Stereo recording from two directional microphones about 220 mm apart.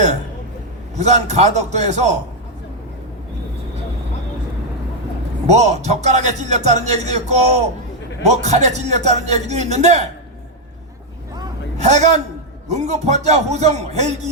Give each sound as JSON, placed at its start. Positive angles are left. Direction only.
{"t": 0.9, "sound": "speech", "side_deg": -30}
{"t": 5.5, "sound": "speech", "side_deg": -30}
{"t": 11.8, "sound": "speech", "side_deg": -30}